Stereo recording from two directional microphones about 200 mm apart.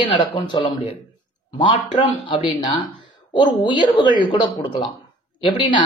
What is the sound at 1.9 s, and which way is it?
Speech, 25° left (ahead or behind).